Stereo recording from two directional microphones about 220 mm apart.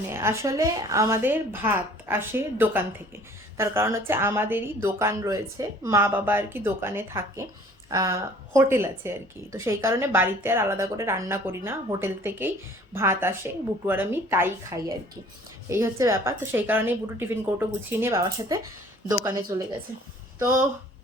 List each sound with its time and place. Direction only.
0.1 s speech: 10° right (ahead or behind)